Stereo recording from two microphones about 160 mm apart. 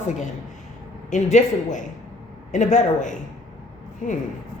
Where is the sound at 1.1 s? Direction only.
50° left (ahead or behind).